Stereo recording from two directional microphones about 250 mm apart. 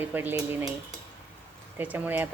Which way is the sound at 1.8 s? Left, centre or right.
Centre.